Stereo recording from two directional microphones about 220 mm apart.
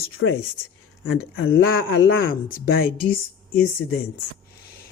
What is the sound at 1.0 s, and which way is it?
Speech, 50° left (ahead or behind).